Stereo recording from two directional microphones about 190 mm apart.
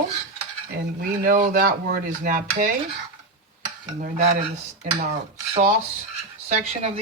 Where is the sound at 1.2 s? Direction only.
45° right (ahead or behind).